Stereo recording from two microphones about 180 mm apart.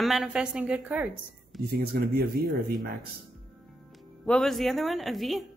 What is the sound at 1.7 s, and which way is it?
Speech, 60° right (ahead or behind).